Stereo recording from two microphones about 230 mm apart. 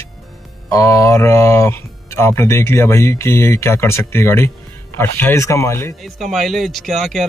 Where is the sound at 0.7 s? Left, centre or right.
Centre.